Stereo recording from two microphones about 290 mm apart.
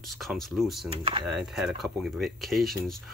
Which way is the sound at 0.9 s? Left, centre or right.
Centre.